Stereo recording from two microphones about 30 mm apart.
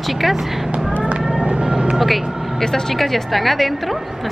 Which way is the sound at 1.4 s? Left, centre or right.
Right.